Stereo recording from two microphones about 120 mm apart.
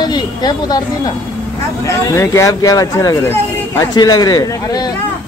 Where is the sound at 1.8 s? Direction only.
25° left (ahead or behind).